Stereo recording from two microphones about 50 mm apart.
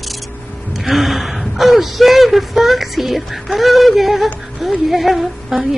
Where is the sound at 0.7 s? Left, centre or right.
Centre.